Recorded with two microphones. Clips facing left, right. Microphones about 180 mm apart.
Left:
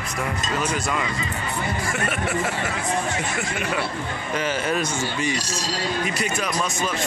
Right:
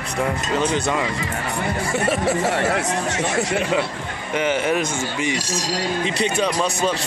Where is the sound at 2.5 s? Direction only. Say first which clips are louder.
Right 5 dB; 75° right (ahead or behind).